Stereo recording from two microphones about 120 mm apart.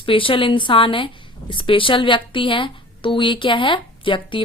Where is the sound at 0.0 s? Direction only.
45° left (ahead or behind).